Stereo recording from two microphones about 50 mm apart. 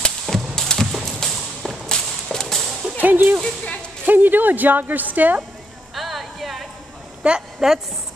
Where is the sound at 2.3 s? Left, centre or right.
Centre.